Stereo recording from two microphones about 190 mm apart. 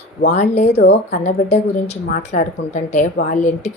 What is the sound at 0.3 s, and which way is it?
Speech, 35° left (ahead or behind).